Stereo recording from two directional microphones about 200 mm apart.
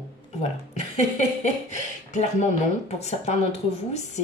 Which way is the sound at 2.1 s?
35° left (ahead or behind).